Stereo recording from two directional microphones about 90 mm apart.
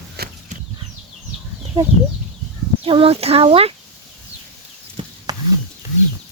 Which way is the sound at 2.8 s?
90° right.